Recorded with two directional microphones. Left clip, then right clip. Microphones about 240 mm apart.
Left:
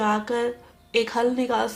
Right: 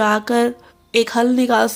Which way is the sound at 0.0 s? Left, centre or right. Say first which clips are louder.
Right 7 dB; right.